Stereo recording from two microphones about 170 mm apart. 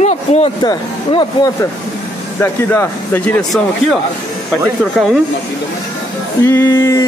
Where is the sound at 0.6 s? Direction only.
30° left (ahead or behind).